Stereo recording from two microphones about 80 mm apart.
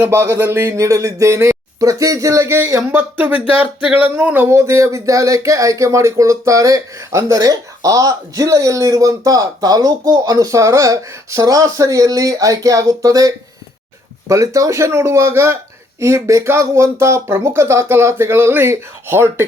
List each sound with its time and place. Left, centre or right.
0.0 s speech: right
4.5 s speech: right